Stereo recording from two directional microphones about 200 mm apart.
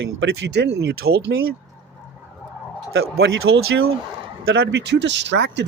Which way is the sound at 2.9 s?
85° right.